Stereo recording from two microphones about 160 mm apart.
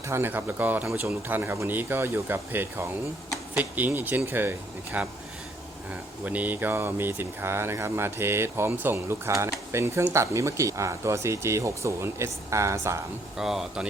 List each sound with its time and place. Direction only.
0.1 s speech: 15° right (ahead or behind)
6.2 s speech: 10° right (ahead or behind)
13.3 s speech: centre (ahead or behind)